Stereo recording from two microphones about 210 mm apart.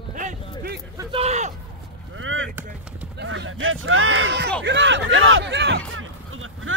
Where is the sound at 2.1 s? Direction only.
70° right (ahead or behind).